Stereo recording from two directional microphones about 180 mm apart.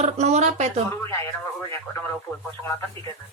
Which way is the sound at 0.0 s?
40° right (ahead or behind).